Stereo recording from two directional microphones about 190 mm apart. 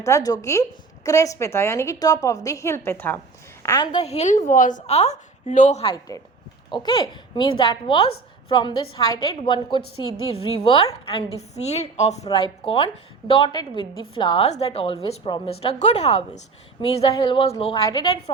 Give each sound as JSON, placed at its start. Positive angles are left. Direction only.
{"t": 0.0, "sound": "a woman's voice", "side_deg": 15}
{"t": 4.0, "sound": "a woman's voice", "side_deg": 35}